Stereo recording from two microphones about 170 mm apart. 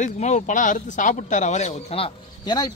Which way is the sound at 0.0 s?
45° left (ahead or behind).